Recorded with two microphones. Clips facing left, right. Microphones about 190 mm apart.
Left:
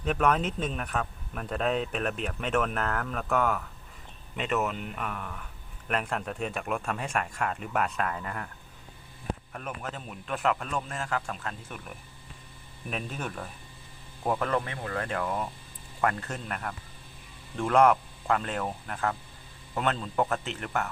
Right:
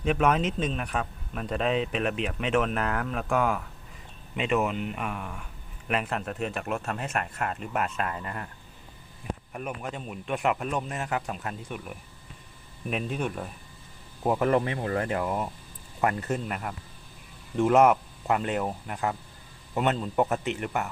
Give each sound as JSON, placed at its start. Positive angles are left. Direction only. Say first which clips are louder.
{"t": 0.0, "sound": "speech", "louder": "right 2 dB", "side_deg": -5}
{"t": 4.8, "sound": "speech", "louder": "right 3 dB", "side_deg": 0}
{"t": 9.5, "sound": "speech", "louder": "right 3 dB", "side_deg": -10}
{"t": 12.9, "sound": "speech", "louder": "right 5 dB", "side_deg": -5}
{"t": 16.5, "sound": "speech", "louder": "right 2 dB", "side_deg": -5}